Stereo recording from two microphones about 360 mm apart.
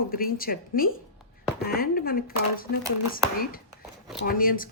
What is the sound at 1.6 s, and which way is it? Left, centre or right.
Speech, left.